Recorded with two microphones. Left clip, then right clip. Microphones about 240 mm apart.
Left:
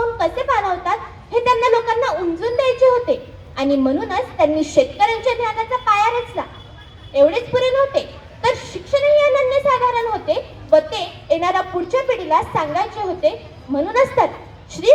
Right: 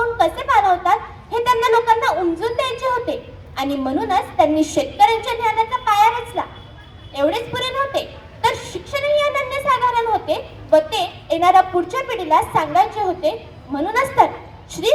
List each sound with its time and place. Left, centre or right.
0.2 s a sound: right
7.1 s chuckle: right
13.9 s a woman's voice: right